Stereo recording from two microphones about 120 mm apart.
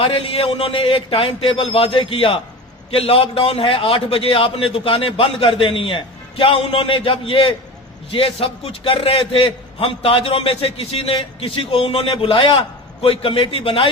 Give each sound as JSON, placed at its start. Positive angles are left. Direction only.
{"t": 0.0, "sound": "a man's voice", "side_deg": 50}